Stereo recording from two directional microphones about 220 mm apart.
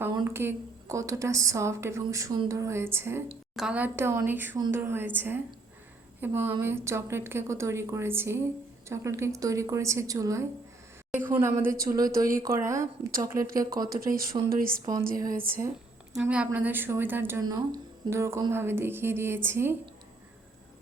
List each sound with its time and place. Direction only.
0.0 s a woman's voice: 15° right (ahead or behind)
13.9 s speech: 40° right (ahead or behind)
14.8 s a woman's voice: 15° right (ahead or behind)
16.1 s a woman's voice: 5° right (ahead or behind)